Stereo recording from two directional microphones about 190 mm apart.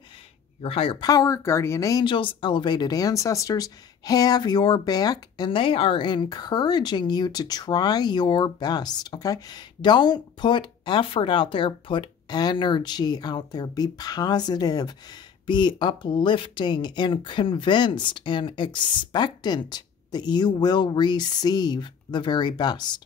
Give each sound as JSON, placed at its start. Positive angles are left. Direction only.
{"t": 0.6, "sound": "speech", "side_deg": 30}